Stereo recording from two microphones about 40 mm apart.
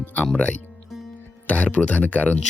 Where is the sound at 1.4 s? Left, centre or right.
Left.